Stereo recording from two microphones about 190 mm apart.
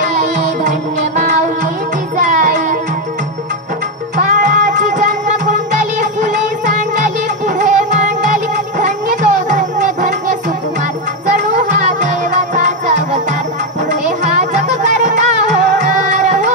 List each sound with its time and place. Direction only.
0.7 s music: 40° right (ahead or behind)
4.3 s music: 45° right (ahead or behind)
11.3 s music: 40° right (ahead or behind)
14.8 s music: 40° right (ahead or behind)